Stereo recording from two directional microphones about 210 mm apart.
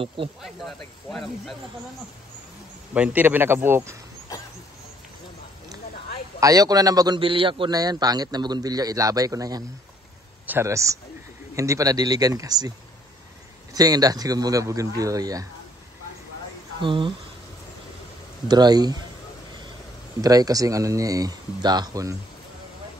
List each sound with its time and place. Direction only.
0.4 s speech: centre (ahead or behind)
2.9 s a man's voice: 5° right (ahead or behind)
6.4 s a man's voice: 15° right (ahead or behind)
13.7 s a man's voice: 15° right (ahead or behind)
16.8 s a man's voice: 25° right (ahead or behind)
18.5 s a man's voice: 20° right (ahead or behind)
20.2 s a man's voice: 15° right (ahead or behind)